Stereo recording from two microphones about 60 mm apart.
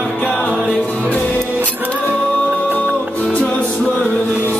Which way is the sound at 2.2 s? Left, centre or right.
Centre.